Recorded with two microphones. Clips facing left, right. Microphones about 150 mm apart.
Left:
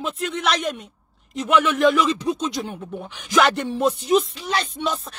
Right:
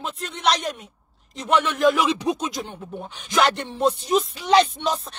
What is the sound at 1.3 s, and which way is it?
Speech, 30° right (ahead or behind).